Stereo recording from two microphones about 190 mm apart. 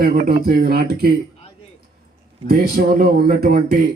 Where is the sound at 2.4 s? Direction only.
55° right (ahead or behind).